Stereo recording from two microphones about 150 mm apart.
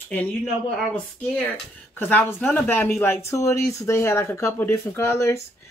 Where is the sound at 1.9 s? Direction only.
15° left (ahead or behind).